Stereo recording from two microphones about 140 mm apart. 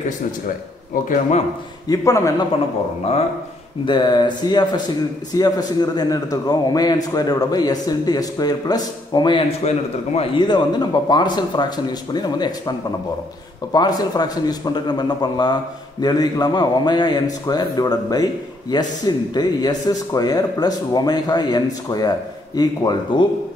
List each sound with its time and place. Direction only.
1.0 s a man's voice: 80° left
1.9 s a man's voice: 25° left (ahead or behind)
3.8 s a man's voice: 35° left (ahead or behind)
9.6 s a man's voice: 50° left (ahead or behind)
10.1 s speech: 35° left (ahead or behind)
13.7 s a man's voice: 30° left (ahead or behind)